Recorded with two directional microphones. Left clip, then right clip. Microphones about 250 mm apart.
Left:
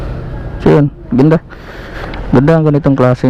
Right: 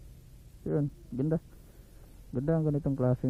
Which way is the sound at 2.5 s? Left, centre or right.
Centre.